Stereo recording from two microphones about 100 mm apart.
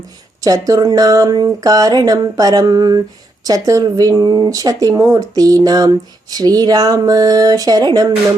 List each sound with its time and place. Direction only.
0.4 s speech: 35° right (ahead or behind)